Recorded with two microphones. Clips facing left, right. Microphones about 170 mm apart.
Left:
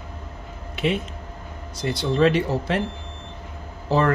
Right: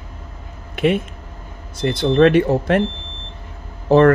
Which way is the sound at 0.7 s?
55° right (ahead or behind).